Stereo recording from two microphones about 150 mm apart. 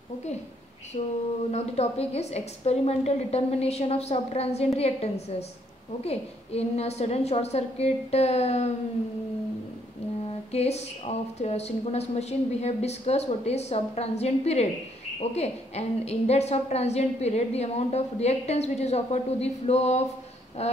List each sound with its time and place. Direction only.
0.9 s a woman's voice: 45° left (ahead or behind)
10.5 s a woman's voice: 45° left (ahead or behind)